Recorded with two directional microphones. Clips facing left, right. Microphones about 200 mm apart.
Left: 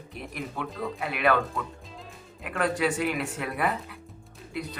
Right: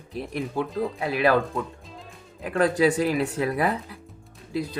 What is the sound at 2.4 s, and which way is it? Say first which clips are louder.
Speech: right 6 dB; 35° right (ahead or behind).